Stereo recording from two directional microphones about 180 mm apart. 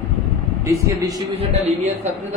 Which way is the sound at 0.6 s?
15° right (ahead or behind).